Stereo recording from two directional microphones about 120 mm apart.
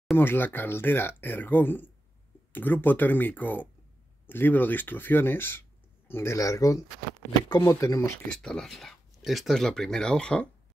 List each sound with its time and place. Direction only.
0.2 s speech: 15° left (ahead or behind)
8.3 s speech: 5° left (ahead or behind)